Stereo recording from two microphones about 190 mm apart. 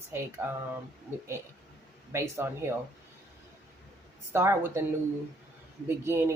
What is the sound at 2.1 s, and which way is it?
Speech, 15° right (ahead or behind).